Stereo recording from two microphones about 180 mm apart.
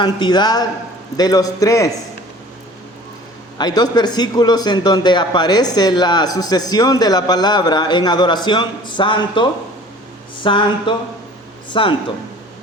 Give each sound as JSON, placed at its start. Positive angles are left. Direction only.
{"t": 0.0, "sound": "a man's voice", "side_deg": 25}
{"t": 3.6, "sound": "a man's voice", "side_deg": 20}